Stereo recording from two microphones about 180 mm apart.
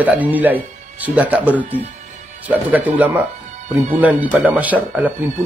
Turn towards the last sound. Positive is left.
turn(degrees=-10)  # may be behind; listen again after turning